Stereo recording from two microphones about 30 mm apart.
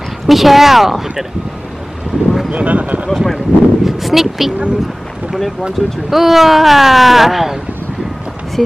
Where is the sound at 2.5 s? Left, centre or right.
Right.